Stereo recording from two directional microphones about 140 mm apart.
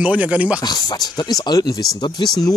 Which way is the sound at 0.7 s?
30° left (ahead or behind).